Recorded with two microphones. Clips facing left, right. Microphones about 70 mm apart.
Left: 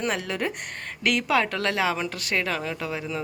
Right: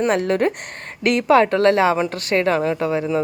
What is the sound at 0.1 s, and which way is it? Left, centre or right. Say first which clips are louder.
A woman's voice: right 10 dB; right.